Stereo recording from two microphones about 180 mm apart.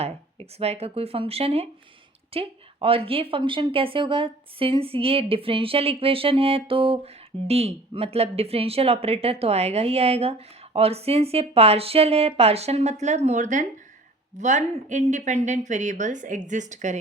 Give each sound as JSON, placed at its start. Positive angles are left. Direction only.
{"t": 0.0, "sound": "a woman's voice", "side_deg": -35}